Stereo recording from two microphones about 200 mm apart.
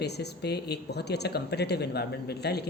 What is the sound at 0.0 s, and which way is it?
Speech, 55° left (ahead or behind).